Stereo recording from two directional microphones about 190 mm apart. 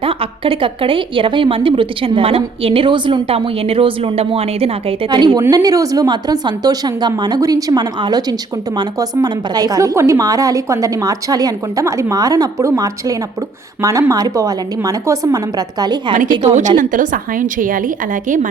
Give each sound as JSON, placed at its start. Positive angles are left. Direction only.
{"t": 0.0, "sound": "a woman's voice", "side_deg": -30}
{"t": 16.4, "sound": "a woman's voice", "side_deg": -40}